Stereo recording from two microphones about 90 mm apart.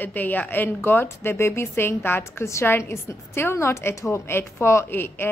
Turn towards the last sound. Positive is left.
turn(degrees=25)  # may be behind; listen again after turning